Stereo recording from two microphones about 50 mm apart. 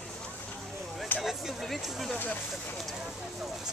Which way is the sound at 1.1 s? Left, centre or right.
Left.